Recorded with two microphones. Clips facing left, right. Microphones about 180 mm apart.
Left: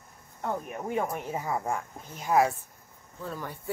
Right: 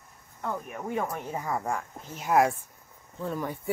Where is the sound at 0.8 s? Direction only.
15° left (ahead or behind).